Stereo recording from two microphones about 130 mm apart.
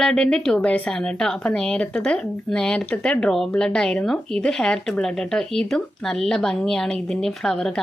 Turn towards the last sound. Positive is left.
turn(degrees=5)  # may be behind; listen again after turning